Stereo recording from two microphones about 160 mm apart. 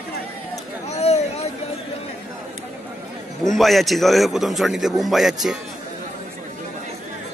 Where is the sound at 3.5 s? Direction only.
Centre (ahead or behind).